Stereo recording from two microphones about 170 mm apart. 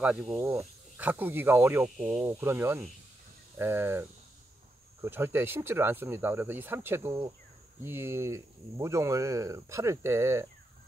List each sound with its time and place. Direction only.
0.0 s speech: 5° right (ahead or behind)
2.2 s speech: 15° right (ahead or behind)
5.0 s speech: 15° right (ahead or behind)